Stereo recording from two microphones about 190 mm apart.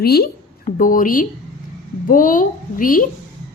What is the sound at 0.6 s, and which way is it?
A woman's voice, 45° left (ahead or behind).